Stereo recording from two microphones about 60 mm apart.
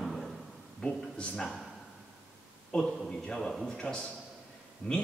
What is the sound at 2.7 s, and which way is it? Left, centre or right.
A man's voice, centre.